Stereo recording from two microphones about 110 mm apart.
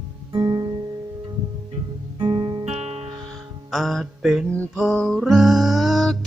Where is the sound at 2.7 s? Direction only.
85° right.